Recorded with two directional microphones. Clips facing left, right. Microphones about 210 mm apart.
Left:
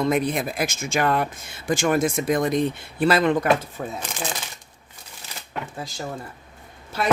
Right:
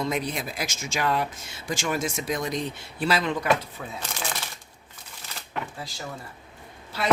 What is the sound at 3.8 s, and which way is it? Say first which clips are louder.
Speech: left 7 dB; 40° left (ahead or behind).